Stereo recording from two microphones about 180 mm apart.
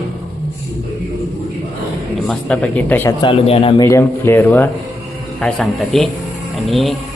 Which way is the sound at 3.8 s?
15° left (ahead or behind).